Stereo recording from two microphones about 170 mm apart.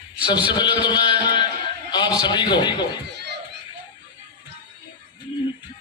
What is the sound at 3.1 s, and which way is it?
Children playing, 75° right (ahead or behind).